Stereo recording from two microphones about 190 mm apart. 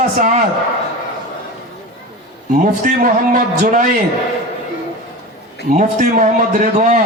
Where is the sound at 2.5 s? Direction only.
45° right (ahead or behind).